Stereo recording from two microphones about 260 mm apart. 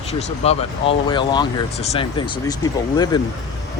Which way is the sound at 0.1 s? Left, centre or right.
Left.